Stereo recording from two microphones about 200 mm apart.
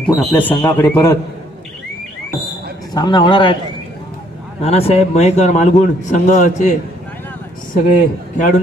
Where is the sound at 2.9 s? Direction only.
20° left (ahead or behind).